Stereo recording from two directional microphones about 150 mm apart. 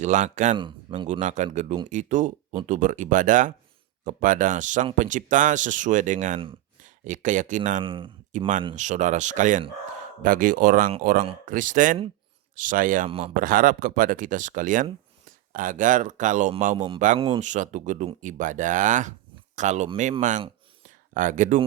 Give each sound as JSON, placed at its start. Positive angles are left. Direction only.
{"t": 0.0, "sound": "speech", "side_deg": -55}
{"t": 0.5, "sound": "speech", "side_deg": -35}
{"t": 1.0, "sound": "speech", "side_deg": -50}
{"t": 7.8, "sound": "speech", "side_deg": -35}
{"t": 8.3, "sound": "speech", "side_deg": -55}
{"t": 16.7, "sound": "speech", "side_deg": -35}
{"t": 17.4, "sound": "speech", "side_deg": -55}
{"t": 20.8, "sound": "a sound", "side_deg": -60}